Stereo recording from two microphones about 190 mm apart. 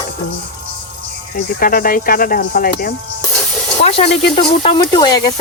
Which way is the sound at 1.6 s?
50° left (ahead or behind).